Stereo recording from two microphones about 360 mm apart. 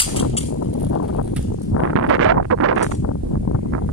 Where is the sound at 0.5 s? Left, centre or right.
Left.